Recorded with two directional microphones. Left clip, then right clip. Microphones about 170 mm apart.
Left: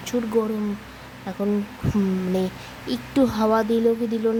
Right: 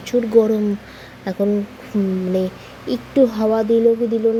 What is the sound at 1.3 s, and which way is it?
Speech, 20° right (ahead or behind).